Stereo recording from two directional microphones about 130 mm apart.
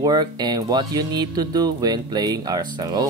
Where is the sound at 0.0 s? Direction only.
30° right (ahead or behind).